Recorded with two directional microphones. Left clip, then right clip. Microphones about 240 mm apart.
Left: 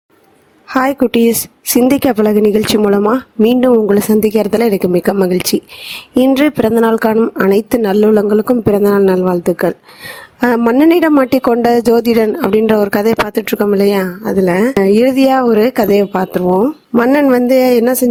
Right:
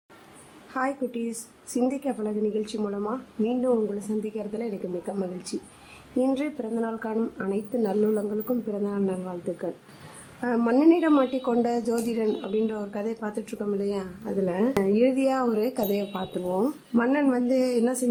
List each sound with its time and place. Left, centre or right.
0.7 s speech: left